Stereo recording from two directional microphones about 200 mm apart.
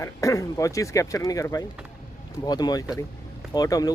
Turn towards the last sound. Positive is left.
turn(degrees=20)  # may be behind; listen again after turning